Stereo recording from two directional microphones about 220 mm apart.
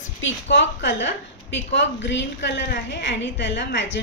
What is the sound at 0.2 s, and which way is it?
A woman's voice, 55° left (ahead or behind).